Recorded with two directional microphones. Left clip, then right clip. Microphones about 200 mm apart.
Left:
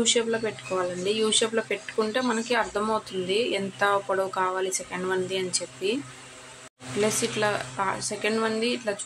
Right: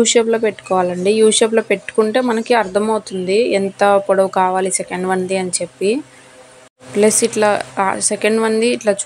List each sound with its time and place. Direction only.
0.0 s speech: 35° right (ahead or behind)
7.0 s speech: 40° right (ahead or behind)